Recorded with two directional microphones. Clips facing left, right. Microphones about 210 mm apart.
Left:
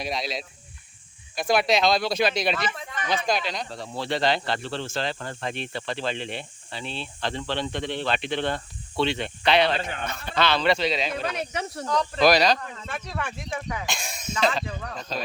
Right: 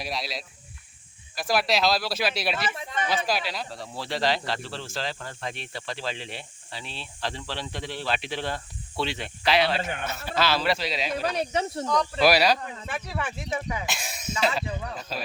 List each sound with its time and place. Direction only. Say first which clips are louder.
0.0 s speech: left 3 dB; centre (ahead or behind)
11.3 s speech: right 3 dB; 30° right (ahead or behind)
12.1 s speech: left 2 dB; 10° right (ahead or behind)